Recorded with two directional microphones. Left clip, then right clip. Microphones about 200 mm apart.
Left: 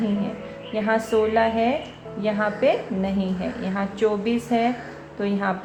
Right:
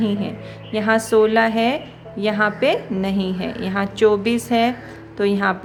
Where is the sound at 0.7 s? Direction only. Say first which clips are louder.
Right 5 dB; 45° right (ahead or behind).